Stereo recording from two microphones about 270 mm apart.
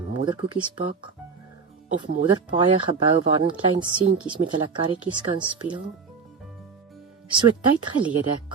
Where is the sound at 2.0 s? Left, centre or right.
Centre.